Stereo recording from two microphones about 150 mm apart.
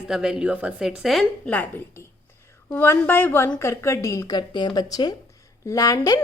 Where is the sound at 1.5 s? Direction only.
10° left (ahead or behind).